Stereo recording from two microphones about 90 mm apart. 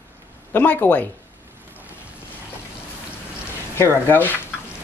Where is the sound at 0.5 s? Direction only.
20° left (ahead or behind).